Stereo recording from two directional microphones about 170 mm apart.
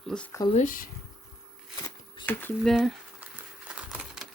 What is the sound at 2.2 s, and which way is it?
Speech, 10° left (ahead or behind).